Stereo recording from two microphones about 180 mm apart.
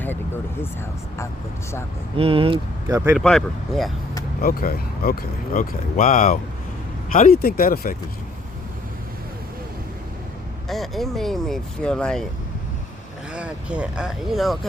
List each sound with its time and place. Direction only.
2.1 s speech: 30° right (ahead or behind)
2.9 s speech: 10° right (ahead or behind)
3.2 s speech: centre (ahead or behind)
4.4 s speech: 55° left (ahead or behind)
10.7 s speech: centre (ahead or behind)
13.3 s speech: 5° right (ahead or behind)